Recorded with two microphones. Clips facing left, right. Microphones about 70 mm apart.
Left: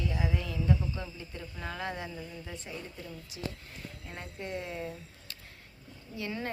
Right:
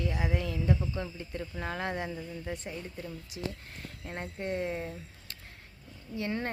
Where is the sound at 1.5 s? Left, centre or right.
Right.